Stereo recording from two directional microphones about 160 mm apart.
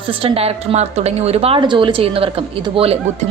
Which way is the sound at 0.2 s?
35° right (ahead or behind).